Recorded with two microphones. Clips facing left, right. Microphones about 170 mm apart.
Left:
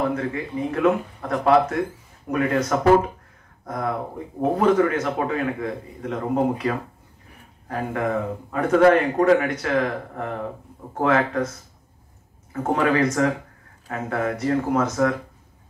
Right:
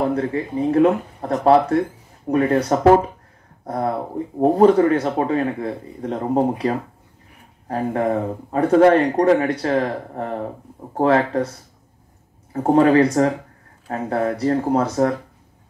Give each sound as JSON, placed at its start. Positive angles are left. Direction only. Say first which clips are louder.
{"t": 0.1, "sound": "speech", "louder": "right 4 dB", "side_deg": -35}
{"t": 12.7, "sound": "speech", "louder": "right 6 dB", "side_deg": -35}